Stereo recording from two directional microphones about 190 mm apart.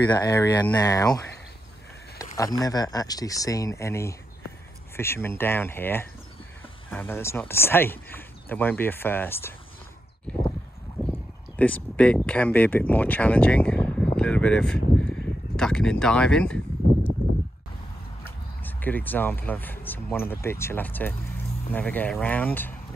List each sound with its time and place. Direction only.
0.1 s speech: 20° left (ahead or behind)
2.3 s speech: 20° left (ahead or behind)
11.1 s speech: 5° left (ahead or behind)
18.2 s speech: 10° left (ahead or behind)